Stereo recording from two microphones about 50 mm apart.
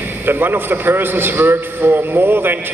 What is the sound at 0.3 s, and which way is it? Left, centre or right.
A man's voice, right.